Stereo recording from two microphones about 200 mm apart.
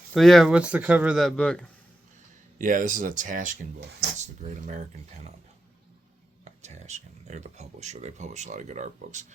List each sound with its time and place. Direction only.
0.1 s speech: centre (ahead or behind)
2.6 s speech: 40° right (ahead or behind)
6.4 s speech: 35° right (ahead or behind)